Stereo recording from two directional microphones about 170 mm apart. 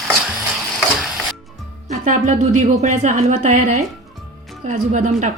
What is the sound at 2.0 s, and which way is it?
Speech, 50° right (ahead or behind).